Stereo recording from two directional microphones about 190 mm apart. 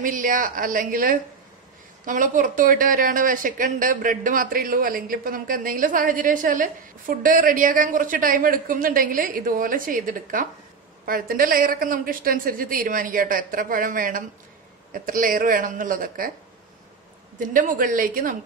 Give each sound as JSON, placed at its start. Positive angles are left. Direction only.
{"t": 0.0, "sound": "speech", "side_deg": -45}
{"t": 17.4, "sound": "speech", "side_deg": -45}